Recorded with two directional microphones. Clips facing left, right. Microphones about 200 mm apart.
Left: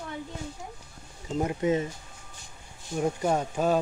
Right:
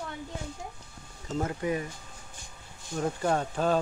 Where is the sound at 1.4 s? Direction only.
20° left (ahead or behind).